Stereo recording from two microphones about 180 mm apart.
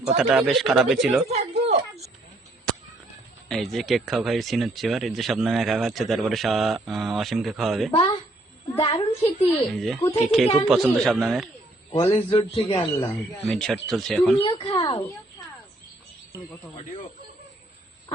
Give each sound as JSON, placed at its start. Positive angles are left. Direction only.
{"t": 0.0, "sound": "speech", "side_deg": 0}
{"t": 1.3, "sound": "a sound", "side_deg": -35}
{"t": 3.5, "sound": "speech", "side_deg": 0}
{"t": 8.8, "sound": "a child's voice", "side_deg": 30}
{"t": 9.7, "sound": "speech", "side_deg": 0}
{"t": 12.1, "sound": "speech", "side_deg": 30}
{"t": 13.0, "sound": "speech", "side_deg": 10}
{"t": 14.4, "sound": "speech", "side_deg": 25}